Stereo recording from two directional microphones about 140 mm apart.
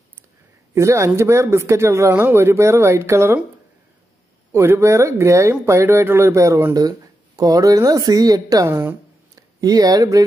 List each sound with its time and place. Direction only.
0.7 s speech: 20° right (ahead or behind)
4.5 s speech: 15° right (ahead or behind)